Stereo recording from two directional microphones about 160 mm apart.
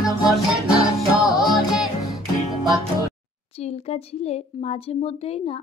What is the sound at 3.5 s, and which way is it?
A woman's voice, 40° left (ahead or behind).